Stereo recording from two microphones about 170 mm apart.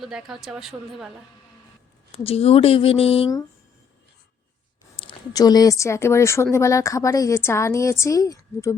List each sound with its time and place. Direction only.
0.0 s speech: 5° right (ahead or behind)
2.1 s speech: 35° left (ahead or behind)
4.9 s speech: 25° left (ahead or behind)